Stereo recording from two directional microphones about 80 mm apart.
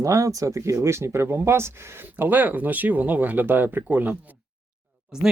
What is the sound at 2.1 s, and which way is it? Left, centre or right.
Speech, right.